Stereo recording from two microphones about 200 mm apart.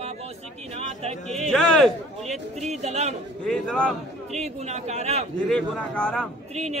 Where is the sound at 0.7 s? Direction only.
30° right (ahead or behind).